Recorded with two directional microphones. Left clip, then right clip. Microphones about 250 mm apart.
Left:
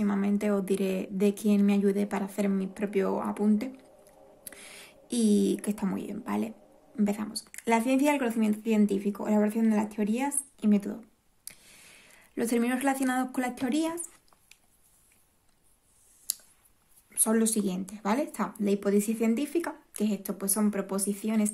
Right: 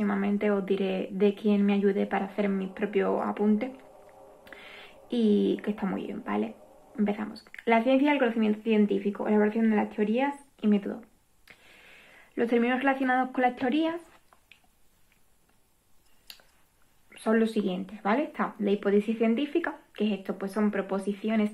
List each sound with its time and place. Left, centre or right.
0.0 s speech: left
17.1 s speech: left